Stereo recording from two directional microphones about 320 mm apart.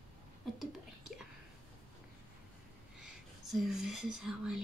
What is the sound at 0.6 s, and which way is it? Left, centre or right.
Whispering, centre.